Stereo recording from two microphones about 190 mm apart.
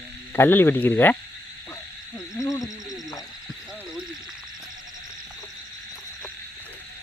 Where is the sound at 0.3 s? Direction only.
10° left (ahead or behind).